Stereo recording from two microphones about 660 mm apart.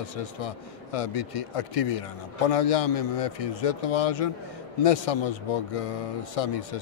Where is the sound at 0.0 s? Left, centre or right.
Left.